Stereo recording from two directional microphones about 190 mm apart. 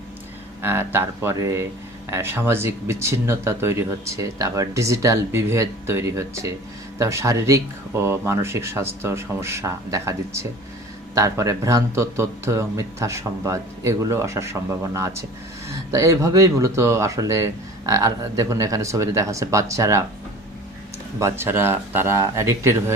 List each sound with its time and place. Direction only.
0.6 s speech: 10° right (ahead or behind)
21.2 s speech: 15° right (ahead or behind)